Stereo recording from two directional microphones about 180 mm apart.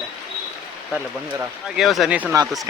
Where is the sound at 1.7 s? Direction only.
Centre (ahead or behind).